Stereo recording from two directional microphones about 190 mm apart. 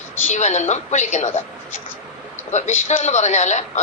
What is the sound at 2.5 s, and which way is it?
Speech, 40° left (ahead or behind).